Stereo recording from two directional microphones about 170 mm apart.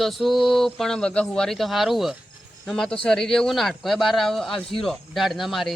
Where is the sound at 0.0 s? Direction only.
Centre (ahead or behind).